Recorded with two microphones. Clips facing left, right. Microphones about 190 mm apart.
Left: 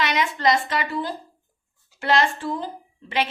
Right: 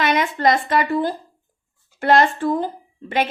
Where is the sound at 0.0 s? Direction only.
50° right (ahead or behind).